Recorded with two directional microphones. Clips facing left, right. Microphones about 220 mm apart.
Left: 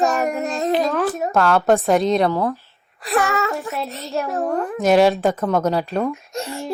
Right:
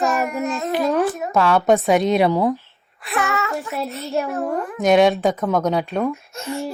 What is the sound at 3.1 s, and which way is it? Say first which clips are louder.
Speech: left 3 dB; 35° left (ahead or behind).